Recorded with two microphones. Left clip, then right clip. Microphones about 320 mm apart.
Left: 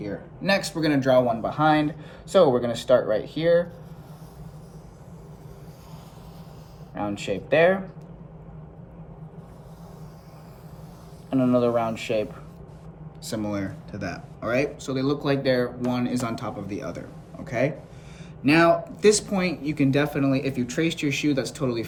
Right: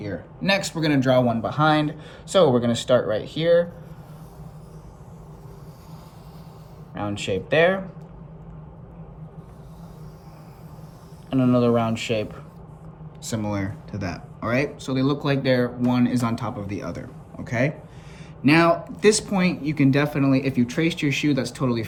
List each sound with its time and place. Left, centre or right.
0.0 s a man's voice: right
6.9 s speech: right
11.3 s speech: right